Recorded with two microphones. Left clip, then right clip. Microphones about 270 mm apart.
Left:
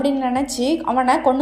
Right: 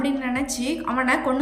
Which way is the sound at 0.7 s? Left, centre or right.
Centre.